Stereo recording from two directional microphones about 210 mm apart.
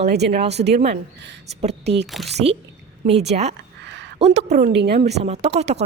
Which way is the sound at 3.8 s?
55° right (ahead or behind).